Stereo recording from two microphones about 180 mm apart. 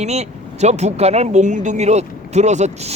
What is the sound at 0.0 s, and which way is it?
Speech, 35° right (ahead or behind).